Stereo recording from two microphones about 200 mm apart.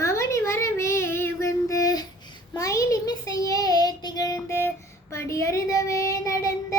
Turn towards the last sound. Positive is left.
turn(degrees=15)  # may be behind; listen again after turning